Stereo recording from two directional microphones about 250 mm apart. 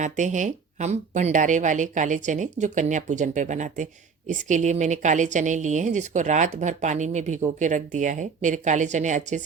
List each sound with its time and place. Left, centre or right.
0.0 s speech: right